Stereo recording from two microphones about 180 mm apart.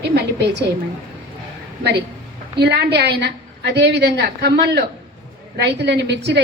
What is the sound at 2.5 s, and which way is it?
A woman's voice, 65° right (ahead or behind).